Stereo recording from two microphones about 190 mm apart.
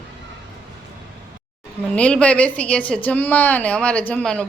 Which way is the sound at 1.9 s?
5° left (ahead or behind).